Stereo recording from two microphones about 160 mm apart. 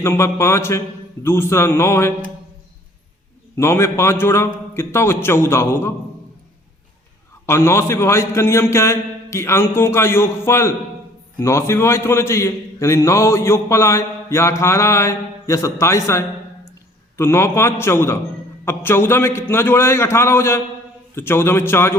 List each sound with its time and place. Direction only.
0.0 s a man's voice: 15° left (ahead or behind)
3.6 s a man's voice: 15° left (ahead or behind)
7.4 s a man's voice: 15° left (ahead or behind)